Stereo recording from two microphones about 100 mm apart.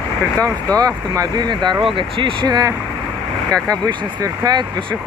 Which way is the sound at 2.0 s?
60° right (ahead or behind).